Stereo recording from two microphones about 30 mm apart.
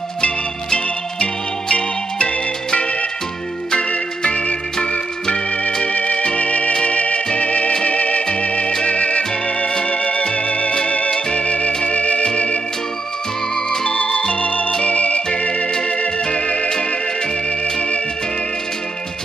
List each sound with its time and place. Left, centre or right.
0.7 s music: left
5.7 s organ: left
5.9 s music: left
8.4 s organ: left
11.3 s music: left
13.8 s organ: left
14.8 s music: left
15.2 s organ: left
16.3 s music: left